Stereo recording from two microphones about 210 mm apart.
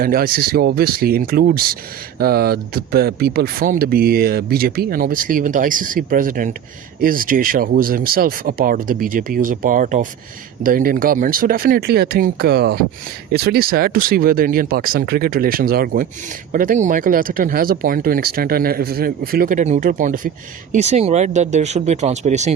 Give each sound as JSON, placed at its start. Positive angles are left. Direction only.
{"t": 0.0, "sound": "speech", "side_deg": -45}